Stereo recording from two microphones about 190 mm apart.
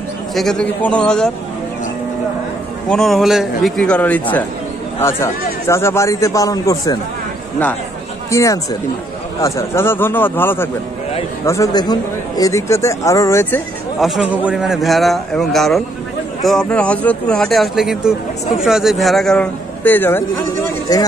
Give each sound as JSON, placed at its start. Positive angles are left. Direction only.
{"t": 0.3, "sound": "speech", "side_deg": 0}
{"t": 2.9, "sound": "speech", "side_deg": 0}
{"t": 8.3, "sound": "speech", "side_deg": 15}
{"t": 13.9, "sound": "speech", "side_deg": 0}